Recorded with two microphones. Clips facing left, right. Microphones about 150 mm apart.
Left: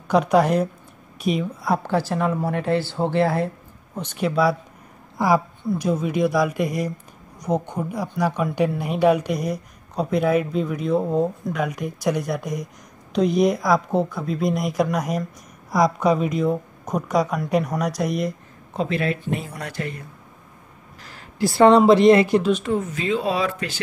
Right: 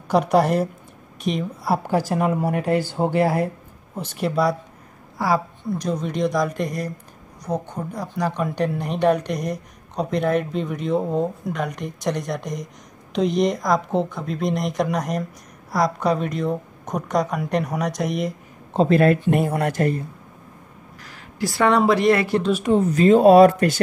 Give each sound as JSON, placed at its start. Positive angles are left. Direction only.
{"t": 0.1, "sound": "speech", "side_deg": 0}
{"t": 5.2, "sound": "speech", "side_deg": 20}
{"t": 5.6, "sound": "speech", "side_deg": 5}
{"t": 18.7, "sound": "speech", "side_deg": -35}
{"t": 18.9, "sound": "speech", "side_deg": -55}
{"t": 21.0, "sound": "speech", "side_deg": 25}
{"t": 22.5, "sound": "speech", "side_deg": -15}
{"t": 22.8, "sound": "speech", "side_deg": -40}